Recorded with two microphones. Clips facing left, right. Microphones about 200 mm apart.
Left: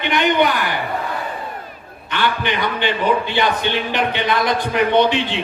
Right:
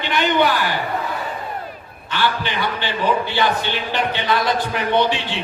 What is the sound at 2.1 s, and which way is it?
A man's voice, 20° left (ahead or behind).